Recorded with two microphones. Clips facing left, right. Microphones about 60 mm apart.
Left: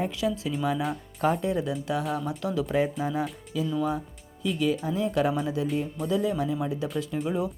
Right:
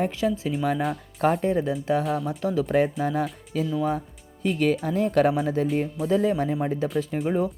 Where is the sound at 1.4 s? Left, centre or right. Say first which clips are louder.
Right 4 dB; right.